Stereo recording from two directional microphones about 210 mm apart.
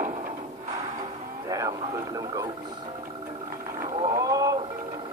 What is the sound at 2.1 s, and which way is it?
Speech, 15° right (ahead or behind).